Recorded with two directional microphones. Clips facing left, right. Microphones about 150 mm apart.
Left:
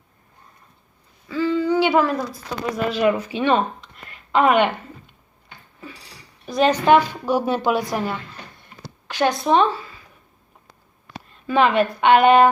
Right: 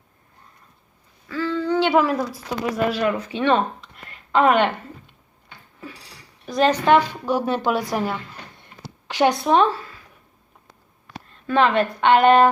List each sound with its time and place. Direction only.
1.3 s a sound: 15° left (ahead or behind)
1.9 s a woman's voice: 5° right (ahead or behind)
6.4 s a woman's voice: centre (ahead or behind)
8.6 s a sound: 20° right (ahead or behind)
9.4 s speech: centre (ahead or behind)
11.4 s a woman's voice: 10° left (ahead or behind)